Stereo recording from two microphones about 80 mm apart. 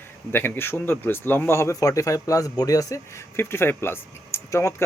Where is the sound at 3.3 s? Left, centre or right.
Left.